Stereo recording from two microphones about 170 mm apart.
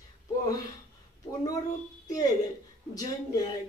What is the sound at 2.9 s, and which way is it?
Speech, 20° left (ahead or behind).